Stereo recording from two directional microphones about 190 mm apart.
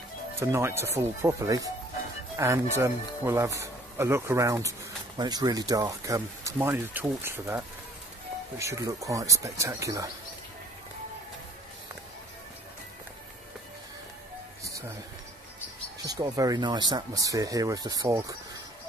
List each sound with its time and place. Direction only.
0.4 s speech: 15° right (ahead or behind)
16.1 s speech: 20° right (ahead or behind)